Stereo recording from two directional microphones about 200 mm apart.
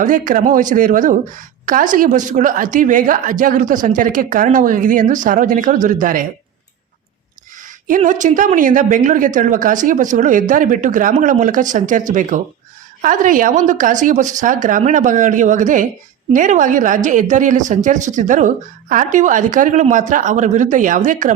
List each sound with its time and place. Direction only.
0.0 s a woman's voice: 40° right (ahead or behind)
7.9 s a woman's voice: 40° right (ahead or behind)